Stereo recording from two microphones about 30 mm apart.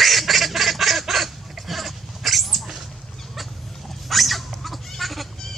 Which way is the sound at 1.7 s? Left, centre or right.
Centre.